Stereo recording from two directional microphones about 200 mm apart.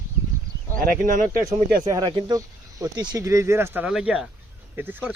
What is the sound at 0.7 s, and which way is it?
Speech, 45° right (ahead or behind).